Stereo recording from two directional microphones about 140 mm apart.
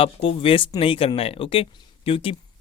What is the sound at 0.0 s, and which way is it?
Speech, 40° left (ahead or behind).